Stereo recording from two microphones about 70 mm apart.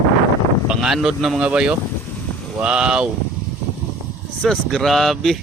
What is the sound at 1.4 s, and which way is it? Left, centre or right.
Speech, centre.